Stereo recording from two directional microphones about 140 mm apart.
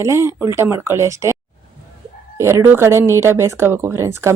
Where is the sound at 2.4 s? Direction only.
20° right (ahead or behind).